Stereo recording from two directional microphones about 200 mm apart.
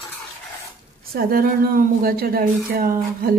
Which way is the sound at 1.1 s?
45° right (ahead or behind).